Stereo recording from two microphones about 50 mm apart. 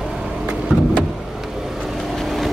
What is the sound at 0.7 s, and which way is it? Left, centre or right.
Vehicle, right.